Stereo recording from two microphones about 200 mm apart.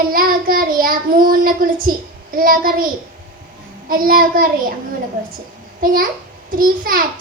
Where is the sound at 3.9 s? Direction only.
45° right (ahead or behind).